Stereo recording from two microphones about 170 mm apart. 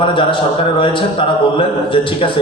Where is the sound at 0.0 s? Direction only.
30° left (ahead or behind).